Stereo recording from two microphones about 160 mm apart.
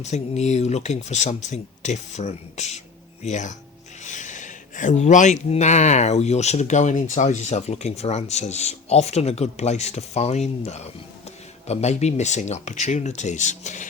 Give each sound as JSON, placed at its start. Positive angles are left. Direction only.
{"t": 0.0, "sound": "speech", "side_deg": 45}